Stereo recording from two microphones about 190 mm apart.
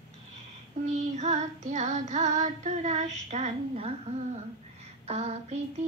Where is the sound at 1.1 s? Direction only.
35° right (ahead or behind).